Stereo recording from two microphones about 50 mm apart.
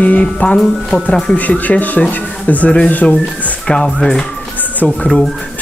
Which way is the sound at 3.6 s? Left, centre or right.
Centre.